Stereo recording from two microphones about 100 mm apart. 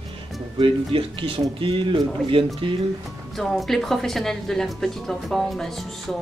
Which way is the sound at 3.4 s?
Centre (ahead or behind).